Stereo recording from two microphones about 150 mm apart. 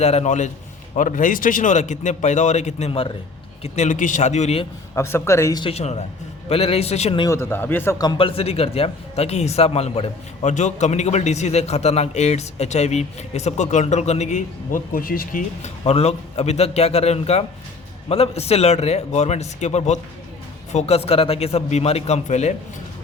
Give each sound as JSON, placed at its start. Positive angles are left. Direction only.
{"t": 0.0, "sound": "speech", "side_deg": 45}
{"t": 4.9, "sound": "speech", "side_deg": 15}
{"t": 5.6, "sound": "speech", "side_deg": 45}
{"t": 7.3, "sound": "speech", "side_deg": 15}
{"t": 8.0, "sound": "speech", "side_deg": 35}
{"t": 15.9, "sound": "speech", "side_deg": 45}